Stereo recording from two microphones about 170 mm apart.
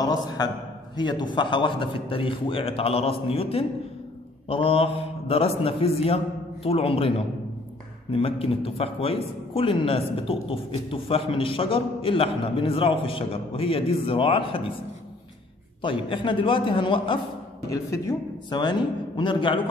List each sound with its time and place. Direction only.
0.0 s a man's voice: 25° left (ahead or behind)
15.8 s speech: 30° left (ahead or behind)
17.6 s speech: 20° left (ahead or behind)